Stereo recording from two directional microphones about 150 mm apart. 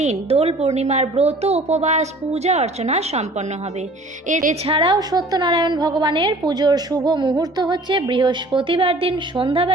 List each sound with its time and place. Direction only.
0.0 s speech: 45° right (ahead or behind)
4.3 s a woman's voice: 60° right (ahead or behind)
4.6 s a woman's voice: 40° right (ahead or behind)
4.9 s a woman's voice: 25° right (ahead or behind)